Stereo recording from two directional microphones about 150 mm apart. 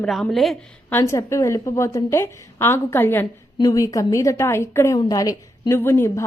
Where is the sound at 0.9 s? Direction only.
15° left (ahead or behind).